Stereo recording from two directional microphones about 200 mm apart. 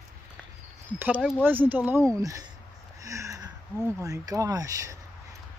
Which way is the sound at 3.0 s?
15° right (ahead or behind).